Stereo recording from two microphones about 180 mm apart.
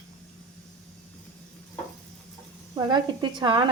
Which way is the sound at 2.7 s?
25° right (ahead or behind).